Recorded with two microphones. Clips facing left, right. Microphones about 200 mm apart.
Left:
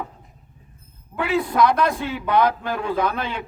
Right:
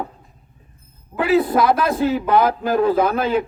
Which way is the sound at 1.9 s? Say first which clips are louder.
Right 6 dB; 40° right (ahead or behind).